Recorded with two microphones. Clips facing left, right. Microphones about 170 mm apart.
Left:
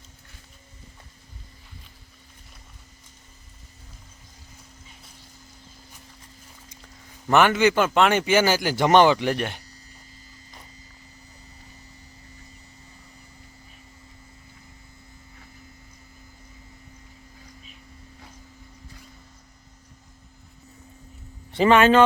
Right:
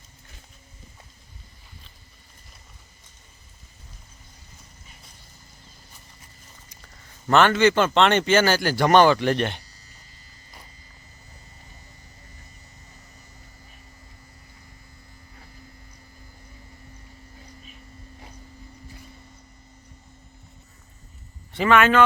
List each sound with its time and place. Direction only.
7.3 s a man's voice: 15° left (ahead or behind)
21.5 s a man's voice: 30° left (ahead or behind)